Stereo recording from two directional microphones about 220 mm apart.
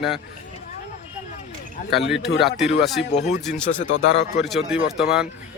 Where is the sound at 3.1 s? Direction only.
30° left (ahead or behind).